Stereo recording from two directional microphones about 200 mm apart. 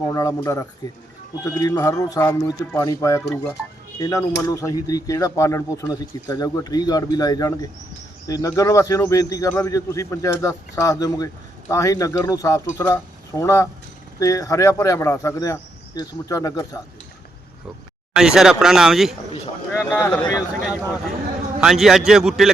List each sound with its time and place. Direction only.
0.1 s speech: 15° left (ahead or behind)
4.4 s speech: 15° left (ahead or behind)
18.1 s speech: 5° right (ahead or behind)
19.7 s speech: 10° left (ahead or behind)